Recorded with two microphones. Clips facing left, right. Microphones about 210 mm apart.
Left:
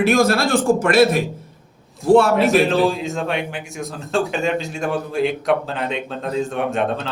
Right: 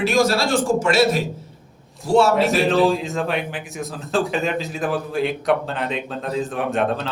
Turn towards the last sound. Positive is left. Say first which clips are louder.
# even
turn(degrees=0)  # may be behind; listen again after turning